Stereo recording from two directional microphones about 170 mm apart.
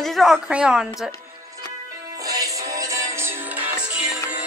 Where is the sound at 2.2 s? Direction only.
20° right (ahead or behind).